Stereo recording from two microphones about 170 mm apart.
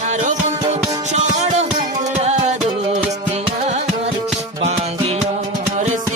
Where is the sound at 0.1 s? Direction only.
45° right (ahead or behind).